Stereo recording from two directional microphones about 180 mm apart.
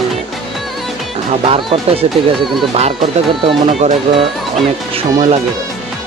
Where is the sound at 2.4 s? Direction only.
Centre (ahead or behind).